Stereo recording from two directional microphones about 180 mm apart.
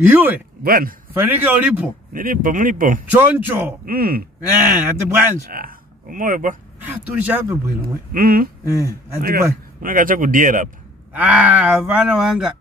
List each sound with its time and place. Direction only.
0.0 s a man's voice: 10° right (ahead or behind)
0.7 s speech: 50° right (ahead or behind)
1.1 s a man's voice: 10° right (ahead or behind)
2.1 s speech: 50° right (ahead or behind)
3.1 s a man's voice: 10° right (ahead or behind)
3.8 s speech: 55° right (ahead or behind)
4.5 s a man's voice: 10° right (ahead or behind)
5.5 s speech: 50° right (ahead or behind)
6.8 s a man's voice: 10° right (ahead or behind)
8.1 s speech: 55° right (ahead or behind)
11.1 s speech: 10° right (ahead or behind)